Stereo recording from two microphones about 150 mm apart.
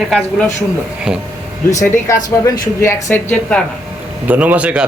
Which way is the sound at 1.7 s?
20° left (ahead or behind).